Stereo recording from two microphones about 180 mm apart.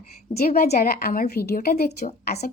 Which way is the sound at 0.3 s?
60° left (ahead or behind).